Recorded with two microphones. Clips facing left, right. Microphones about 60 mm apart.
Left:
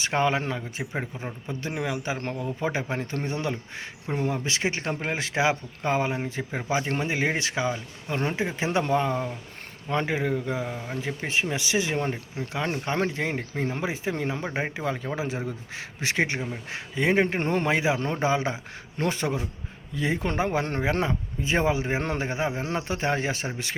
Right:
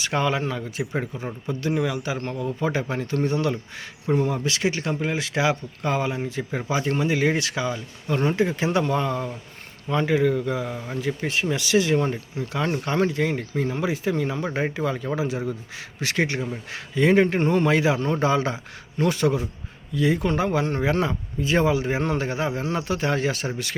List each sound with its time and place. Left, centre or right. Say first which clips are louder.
0.0 s speech: right 1 dB; left
0.9 s speech: right 3 dB; centre
1.5 s speech: right 6 dB; left
6.5 s speech: right 2 dB; left
9.9 s speech: right 5 dB; left
12.5 s speech: right 3 dB; centre
13.0 s speech: right 4 dB; left
17.4 s speech: right 5 dB; left
17.7 s speech: right 3 dB; left